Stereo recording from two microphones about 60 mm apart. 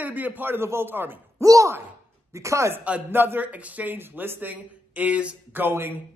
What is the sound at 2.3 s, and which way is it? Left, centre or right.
Speech, right.